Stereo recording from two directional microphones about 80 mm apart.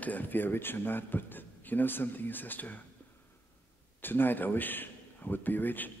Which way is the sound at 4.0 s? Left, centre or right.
Left.